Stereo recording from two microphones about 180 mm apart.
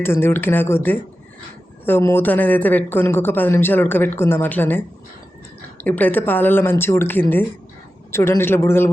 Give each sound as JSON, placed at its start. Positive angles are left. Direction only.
{"t": 0.0, "sound": "speech", "side_deg": 10}